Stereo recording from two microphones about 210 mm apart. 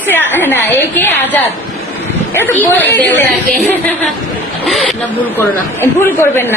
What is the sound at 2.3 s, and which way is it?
Speech, 10° left (ahead or behind).